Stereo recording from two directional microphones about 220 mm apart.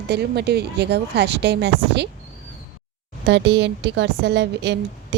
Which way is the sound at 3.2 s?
55° right (ahead or behind).